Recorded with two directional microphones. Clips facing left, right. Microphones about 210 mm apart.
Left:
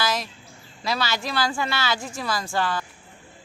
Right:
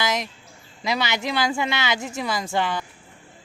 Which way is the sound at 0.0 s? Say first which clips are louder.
Right 1 dB; 20° right (ahead or behind).